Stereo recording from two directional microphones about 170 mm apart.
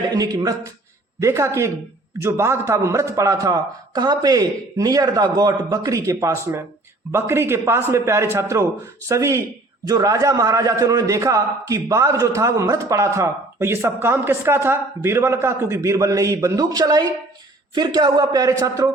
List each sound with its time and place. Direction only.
0.1 s a man's voice: 20° right (ahead or behind)